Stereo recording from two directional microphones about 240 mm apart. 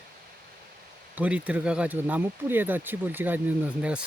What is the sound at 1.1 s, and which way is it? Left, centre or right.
Speech, centre.